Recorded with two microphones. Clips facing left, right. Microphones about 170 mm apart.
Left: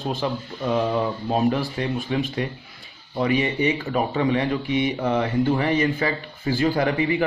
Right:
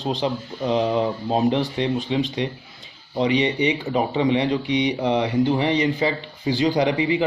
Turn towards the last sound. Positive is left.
turn(degrees=-20)  # may be behind; listen again after turning